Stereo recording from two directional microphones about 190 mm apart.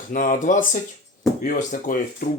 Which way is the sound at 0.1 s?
45° left (ahead or behind).